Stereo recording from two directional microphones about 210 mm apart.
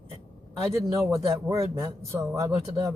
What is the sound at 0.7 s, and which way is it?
A man's voice, 15° right (ahead or behind).